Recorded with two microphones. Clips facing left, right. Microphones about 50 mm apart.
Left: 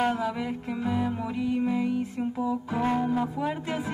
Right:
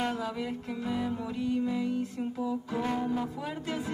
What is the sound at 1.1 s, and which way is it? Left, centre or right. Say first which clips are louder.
Music: left 3 dB; left.